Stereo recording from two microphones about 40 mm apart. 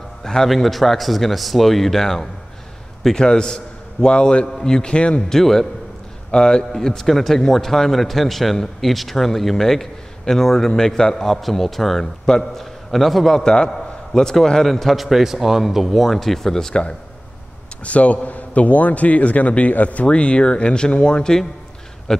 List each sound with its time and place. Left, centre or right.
0.2 s a sound: centre
0.5 s a man's voice: centre; by 4.5 s left
4.5 s speech: centre
5.3 s speech: centre
6.3 s speech: left; by 12.0 s centre
12.0 s speech: centre
15.0 s a man's voice: centre
17.8 s a man's voice: left
20.1 s a man's voice: left